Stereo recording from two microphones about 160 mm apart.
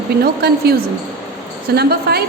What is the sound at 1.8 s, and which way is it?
Speech, 80° right.